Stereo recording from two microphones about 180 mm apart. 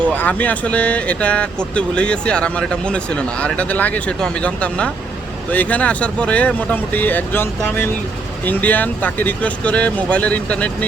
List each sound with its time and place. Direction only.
0.0 s speech: 10° left (ahead or behind)